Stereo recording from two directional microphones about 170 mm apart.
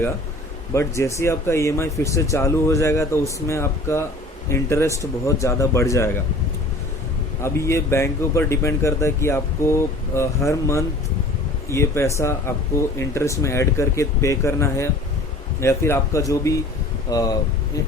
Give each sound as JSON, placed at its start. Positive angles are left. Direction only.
{"t": 0.7, "sound": "speech", "side_deg": 15}
{"t": 7.4, "sound": "speech", "side_deg": 15}